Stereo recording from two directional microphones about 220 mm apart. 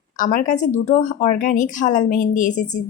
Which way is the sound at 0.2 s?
35° left (ahead or behind).